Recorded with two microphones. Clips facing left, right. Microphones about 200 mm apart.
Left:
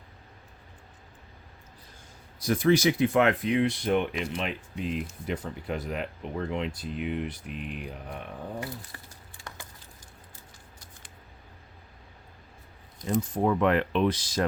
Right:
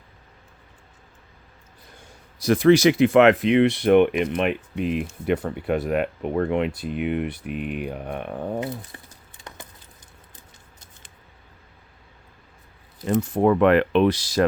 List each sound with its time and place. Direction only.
2.4 s speech: 80° right; by 8.6 s 60° right (ahead or behind)
8.6 s speech: 20° right (ahead or behind)
9.4 s a sound: 20° right (ahead or behind)
10.3 s scissors: 20° right (ahead or behind)
13.1 s speech: 75° right (ahead or behind)